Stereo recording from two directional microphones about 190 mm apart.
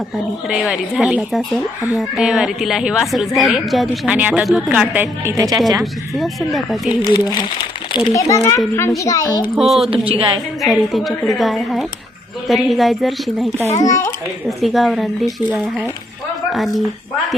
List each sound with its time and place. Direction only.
0.4 s a woman's voice: 5° right (ahead or behind)
5.8 s a woman's voice: centre (ahead or behind)
7.1 s a child's voice: 20° left (ahead or behind)
9.6 s a woman's voice: centre (ahead or behind)
9.9 s a woman's voice: 30° right (ahead or behind)
10.6 s a woman's voice: centre (ahead or behind)
13.8 s a child's voice: 15° left (ahead or behind)
14.6 s a woman's voice: centre (ahead or behind)